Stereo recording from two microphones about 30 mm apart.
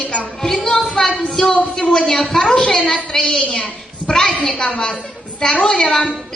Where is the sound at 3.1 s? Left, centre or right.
Centre.